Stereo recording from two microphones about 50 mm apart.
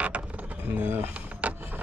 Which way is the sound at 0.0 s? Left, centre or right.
Right.